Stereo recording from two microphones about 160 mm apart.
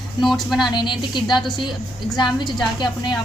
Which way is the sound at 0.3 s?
Centre (ahead or behind).